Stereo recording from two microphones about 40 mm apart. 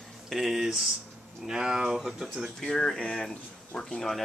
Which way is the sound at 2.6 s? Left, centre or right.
Centre.